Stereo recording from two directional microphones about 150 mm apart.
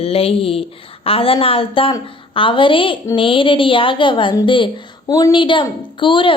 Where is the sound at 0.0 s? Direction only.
40° left (ahead or behind).